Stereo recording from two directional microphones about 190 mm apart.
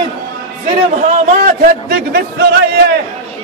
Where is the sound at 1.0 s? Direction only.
40° right (ahead or behind).